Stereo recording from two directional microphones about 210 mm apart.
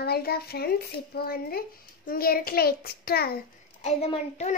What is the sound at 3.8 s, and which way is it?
Speech, 30° left (ahead or behind).